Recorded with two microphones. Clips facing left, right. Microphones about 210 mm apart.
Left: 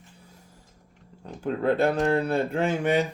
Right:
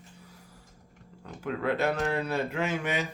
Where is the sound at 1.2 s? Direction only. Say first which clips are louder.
Left 5 dB; 30° left (ahead or behind).